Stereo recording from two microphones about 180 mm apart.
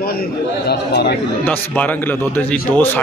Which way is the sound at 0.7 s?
65° left (ahead or behind).